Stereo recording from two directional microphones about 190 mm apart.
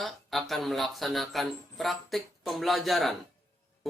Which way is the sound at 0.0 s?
Centre (ahead or behind).